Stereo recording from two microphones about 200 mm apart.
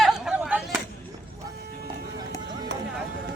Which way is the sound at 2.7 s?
65° right (ahead or behind).